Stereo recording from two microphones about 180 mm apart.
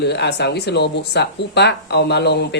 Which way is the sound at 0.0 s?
70° left (ahead or behind).